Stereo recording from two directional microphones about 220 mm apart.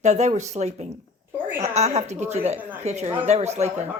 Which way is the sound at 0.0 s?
30° right (ahead or behind).